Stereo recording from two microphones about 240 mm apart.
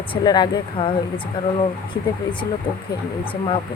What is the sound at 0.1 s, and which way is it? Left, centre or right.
Speech, centre.